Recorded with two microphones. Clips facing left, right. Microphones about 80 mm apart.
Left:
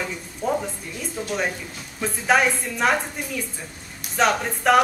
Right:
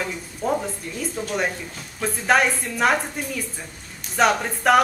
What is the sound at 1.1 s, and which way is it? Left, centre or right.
A woman's voice, centre.